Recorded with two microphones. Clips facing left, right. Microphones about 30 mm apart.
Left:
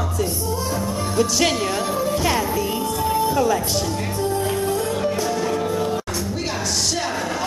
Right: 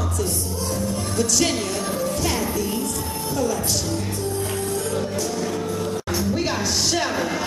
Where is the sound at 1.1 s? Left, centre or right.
Centre.